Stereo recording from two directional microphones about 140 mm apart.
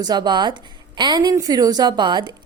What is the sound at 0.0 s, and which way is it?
A woman's voice, 30° right (ahead or behind).